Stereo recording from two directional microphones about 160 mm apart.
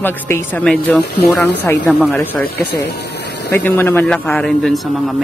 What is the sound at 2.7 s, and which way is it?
Vehicle, 90° left.